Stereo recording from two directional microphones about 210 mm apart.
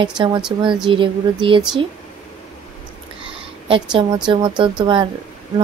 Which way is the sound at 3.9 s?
20° right (ahead or behind).